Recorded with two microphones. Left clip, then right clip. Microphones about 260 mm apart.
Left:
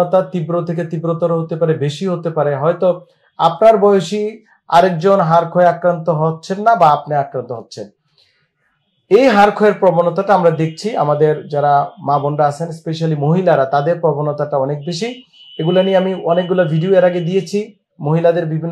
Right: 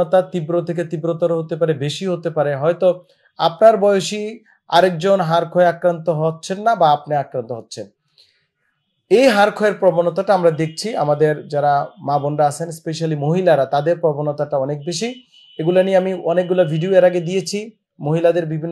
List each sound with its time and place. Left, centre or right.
0.0 s speech: right
9.1 s speech: right